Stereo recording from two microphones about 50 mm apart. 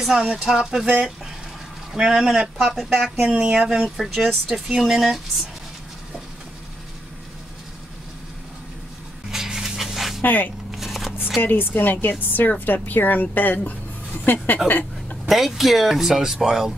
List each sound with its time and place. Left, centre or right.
0.0 s speech: centre
2.0 s speech: centre
2.5 s speech: centre
3.4 s speech: centre
3.8 s speech: centre
9.3 s dog: centre
10.2 s speech: left
10.7 s shuffling cards: centre
11.4 s speech: left
14.7 s a sound: left
15.2 s speech: centre